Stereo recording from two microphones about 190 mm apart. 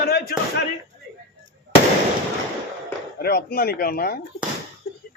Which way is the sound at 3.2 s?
55° left (ahead or behind).